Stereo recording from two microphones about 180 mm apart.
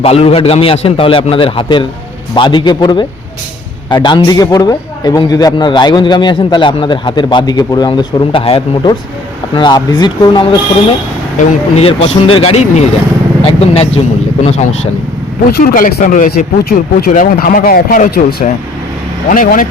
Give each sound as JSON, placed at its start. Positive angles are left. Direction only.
{"t": 0.0, "sound": "a man's voice", "side_deg": 35}
{"t": 11.3, "sound": "a man's voice", "side_deg": 35}
{"t": 15.5, "sound": "speech", "side_deg": 50}
{"t": 19.3, "sound": "speech", "side_deg": 50}